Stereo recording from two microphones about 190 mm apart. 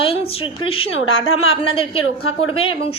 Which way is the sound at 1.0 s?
90° left.